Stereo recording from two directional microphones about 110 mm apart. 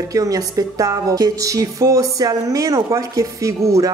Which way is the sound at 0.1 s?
30° right (ahead or behind).